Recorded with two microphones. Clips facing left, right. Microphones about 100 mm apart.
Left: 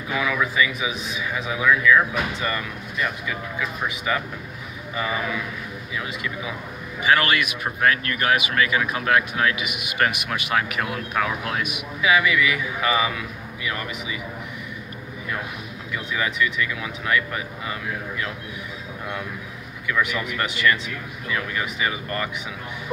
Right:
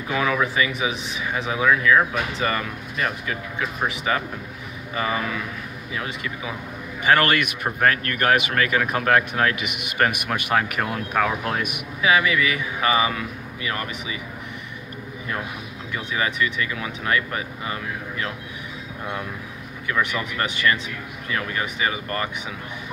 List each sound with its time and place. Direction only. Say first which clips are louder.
0.1 s a man's voice: right 2 dB; 35° right (ahead or behind)
3.5 s a man's voice: right 4 dB; 35° right (ahead or behind)
5.9 s a man's voice: even; 35° right (ahead or behind)
7.0 s a man's voice: right 1 dB; 45° right (ahead or behind)
16.1 s a man's voice: even; 35° right (ahead or behind)
19.9 s a man's voice: even; 30° right (ahead or behind)